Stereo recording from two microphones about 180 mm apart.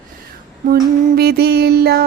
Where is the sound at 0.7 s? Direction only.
60° right (ahead or behind).